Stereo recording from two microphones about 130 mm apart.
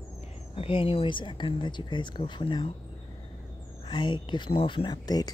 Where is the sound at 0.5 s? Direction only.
45° left (ahead or behind).